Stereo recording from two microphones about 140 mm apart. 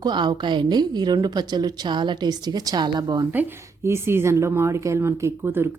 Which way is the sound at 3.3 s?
15° right (ahead or behind).